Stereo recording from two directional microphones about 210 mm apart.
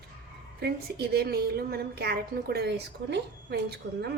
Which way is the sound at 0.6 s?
50° right (ahead or behind).